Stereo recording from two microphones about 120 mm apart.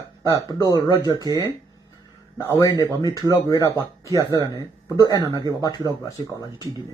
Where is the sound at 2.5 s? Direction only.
30° left (ahead or behind).